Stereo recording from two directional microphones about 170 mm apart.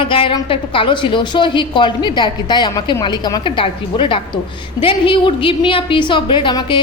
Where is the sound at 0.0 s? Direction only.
30° left (ahead or behind).